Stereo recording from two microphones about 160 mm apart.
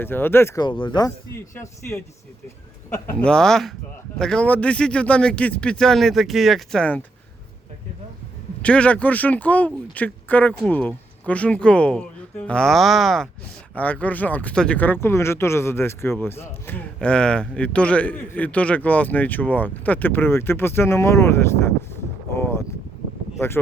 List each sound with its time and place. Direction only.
0.0 s a man's voice: 15° left (ahead or behind)
0.6 s a man's voice: 30° left (ahead or behind); by 7.0 s 5° left (ahead or behind)
8.6 s a man's voice: 10° left (ahead or behind)
22.4 s a sound: 15° left (ahead or behind)